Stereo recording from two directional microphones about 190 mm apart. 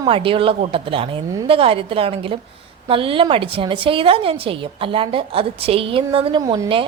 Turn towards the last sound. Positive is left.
turn(degrees=-25)  # may be behind; listen again after turning